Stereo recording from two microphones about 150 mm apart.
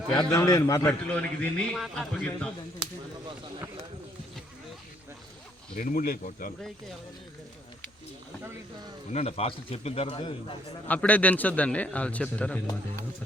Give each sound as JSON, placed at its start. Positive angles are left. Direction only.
{"t": 0.2, "sound": "a man's voice", "side_deg": 25}
{"t": 1.0, "sound": "a man's voice", "side_deg": 10}
{"t": 1.7, "sound": "speech", "side_deg": 0}
{"t": 5.7, "sound": "speech", "side_deg": 60}
{"t": 9.1, "sound": "speech", "side_deg": 45}
{"t": 10.8, "sound": "a man's voice", "side_deg": 10}